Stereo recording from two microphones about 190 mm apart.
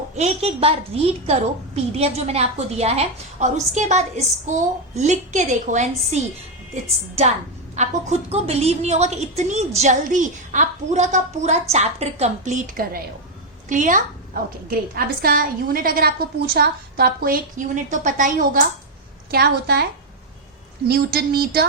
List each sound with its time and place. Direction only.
0.2 s a woman's voice: 30° right (ahead or behind)
7.8 s a woman's voice: 35° right (ahead or behind)
19.3 s speech: 60° right (ahead or behind)
20.8 s speech: 55° right (ahead or behind)